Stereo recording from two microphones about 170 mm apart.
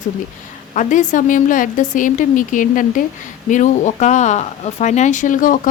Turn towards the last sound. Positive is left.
turn(degrees=50)  # may be behind; listen again after turning